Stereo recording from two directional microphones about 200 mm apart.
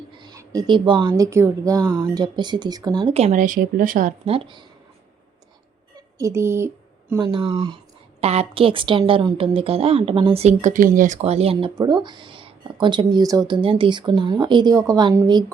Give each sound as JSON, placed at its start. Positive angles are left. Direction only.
{"t": 0.2, "sound": "speech", "side_deg": -20}
{"t": 4.3, "sound": "speech", "side_deg": -25}
{"t": 6.1, "sound": "speech", "side_deg": -15}